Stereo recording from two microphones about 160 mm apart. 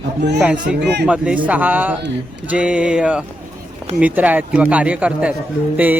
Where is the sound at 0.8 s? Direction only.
90° right.